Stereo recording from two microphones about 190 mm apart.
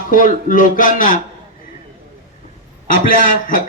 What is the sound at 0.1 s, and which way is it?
A man's voice, 45° left (ahead or behind).